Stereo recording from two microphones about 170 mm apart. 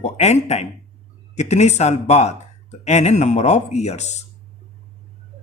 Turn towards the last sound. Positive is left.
turn(degrees=40)  # may be behind; listen again after turning